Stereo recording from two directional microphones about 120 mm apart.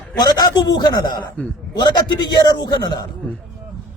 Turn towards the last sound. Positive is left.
turn(degrees=35)  # may be behind; listen again after turning